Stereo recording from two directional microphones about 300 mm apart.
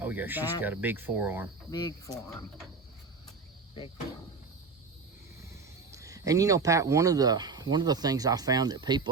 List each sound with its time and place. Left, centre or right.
0.0 s speech: centre
1.7 s speech: centre
3.8 s speech: centre
5.9 s speech: centre